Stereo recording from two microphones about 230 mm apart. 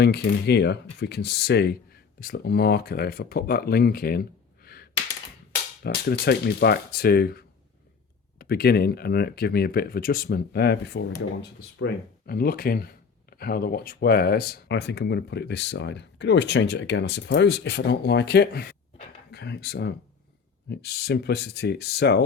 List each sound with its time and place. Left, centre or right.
0.0 s speech: left